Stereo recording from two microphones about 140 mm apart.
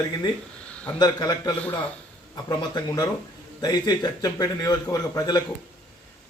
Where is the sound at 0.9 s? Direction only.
30° left (ahead or behind).